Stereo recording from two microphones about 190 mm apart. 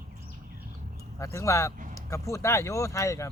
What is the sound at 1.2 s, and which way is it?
Speech, 15° left (ahead or behind).